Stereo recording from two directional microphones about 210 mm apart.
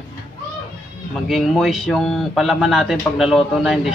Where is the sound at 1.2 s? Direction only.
Centre (ahead or behind).